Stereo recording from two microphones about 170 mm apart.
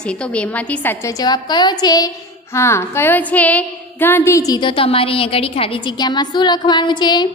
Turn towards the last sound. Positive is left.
turn(degrees=25)  # may be behind; listen again after turning